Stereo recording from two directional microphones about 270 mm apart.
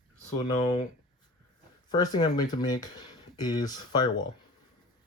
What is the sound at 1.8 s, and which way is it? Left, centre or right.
Speech, centre.